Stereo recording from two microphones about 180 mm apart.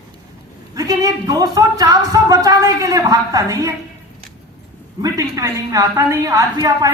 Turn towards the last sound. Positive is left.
turn(degrees=-20)  # may be behind; listen again after turning